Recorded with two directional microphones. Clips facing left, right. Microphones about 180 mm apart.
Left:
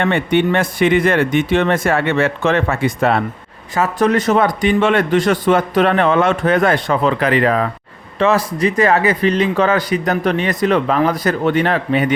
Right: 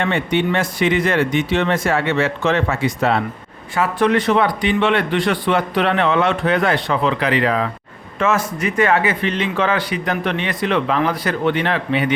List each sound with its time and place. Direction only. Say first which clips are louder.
0.0 s speech: left 4 dB; 55° left (ahead or behind)
3.8 s speech: left 2 dB; 40° left (ahead or behind)
8.2 s speech: left 4 dB; 35° left (ahead or behind)